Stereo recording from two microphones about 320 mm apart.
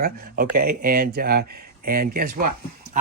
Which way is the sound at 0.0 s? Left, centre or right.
Right.